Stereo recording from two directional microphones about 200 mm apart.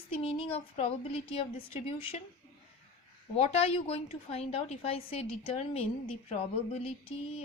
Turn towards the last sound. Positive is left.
turn(degrees=30)  # may be behind; listen again after turning